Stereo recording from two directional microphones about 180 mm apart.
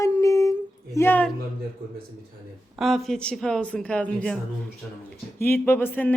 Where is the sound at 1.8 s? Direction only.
60° right (ahead or behind).